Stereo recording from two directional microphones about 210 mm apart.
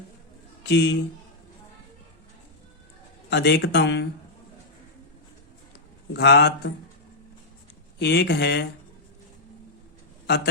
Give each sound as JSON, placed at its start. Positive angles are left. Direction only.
{"t": 0.6, "sound": "a man's voice", "side_deg": 55}
{"t": 3.2, "sound": "speech", "side_deg": 50}
{"t": 6.1, "sound": "speech", "side_deg": 50}
{"t": 7.9, "sound": "speech", "side_deg": 50}
{"t": 10.2, "sound": "a man's voice", "side_deg": 50}